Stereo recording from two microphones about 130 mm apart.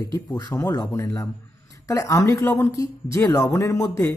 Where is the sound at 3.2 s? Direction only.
30° left (ahead or behind).